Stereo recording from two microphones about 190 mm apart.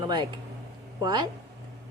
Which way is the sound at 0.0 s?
25° right (ahead or behind).